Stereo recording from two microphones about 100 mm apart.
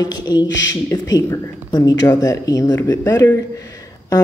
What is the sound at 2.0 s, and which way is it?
Speech, 35° left (ahead or behind).